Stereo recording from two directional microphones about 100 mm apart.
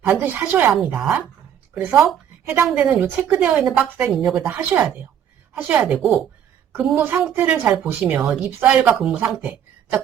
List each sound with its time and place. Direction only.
0.0 s a woman's voice: 20° right (ahead or behind)
4.4 s a woman's voice: 20° right (ahead or behind)